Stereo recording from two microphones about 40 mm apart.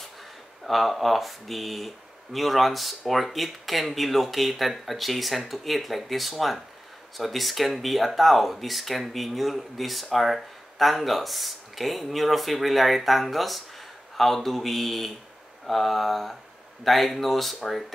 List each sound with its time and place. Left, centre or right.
0.7 s speech: centre